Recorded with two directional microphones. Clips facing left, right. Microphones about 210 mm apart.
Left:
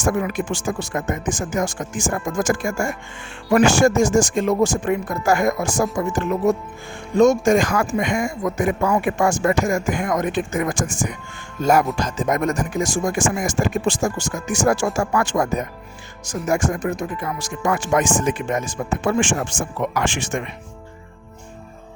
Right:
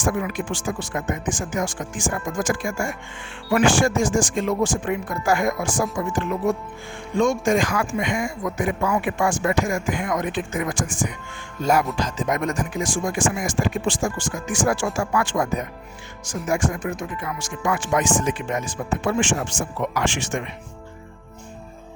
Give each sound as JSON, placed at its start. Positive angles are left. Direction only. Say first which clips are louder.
{"t": 0.0, "sound": "speech", "louder": "left 3 dB", "side_deg": 45}